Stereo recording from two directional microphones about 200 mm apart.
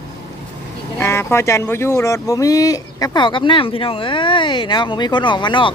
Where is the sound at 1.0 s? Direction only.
15° left (ahead or behind).